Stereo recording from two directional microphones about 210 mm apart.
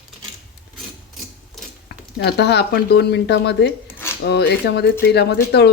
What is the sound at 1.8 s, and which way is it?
Speech, 55° left (ahead or behind).